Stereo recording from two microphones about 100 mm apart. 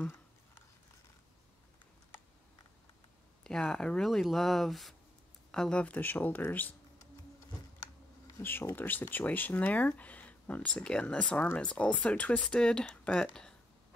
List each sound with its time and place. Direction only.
3.4 s speech: 5° left (ahead or behind)
8.4 s speech: 20° left (ahead or behind)